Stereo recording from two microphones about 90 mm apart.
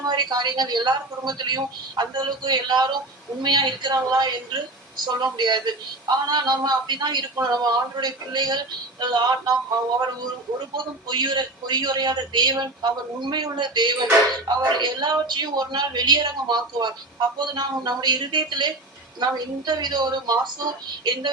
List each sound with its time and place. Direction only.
0.0 s a woman's voice: 50° right (ahead or behind)
11.1 s speech: 55° right (ahead or behind)